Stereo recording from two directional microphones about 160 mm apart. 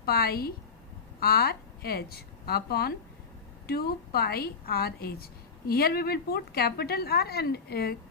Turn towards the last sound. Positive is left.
turn(degrees=80)